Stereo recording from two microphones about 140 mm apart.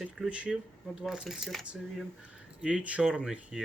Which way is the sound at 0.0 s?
5° right (ahead or behind).